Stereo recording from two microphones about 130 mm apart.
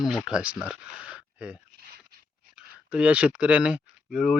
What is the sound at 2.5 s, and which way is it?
Speech, 10° right (ahead or behind).